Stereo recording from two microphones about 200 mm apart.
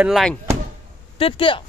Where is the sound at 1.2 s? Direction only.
25° left (ahead or behind).